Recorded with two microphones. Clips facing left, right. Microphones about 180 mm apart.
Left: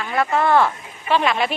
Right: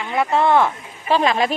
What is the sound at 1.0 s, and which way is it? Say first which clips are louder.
Speech: right 2 dB; 35° right (ahead or behind).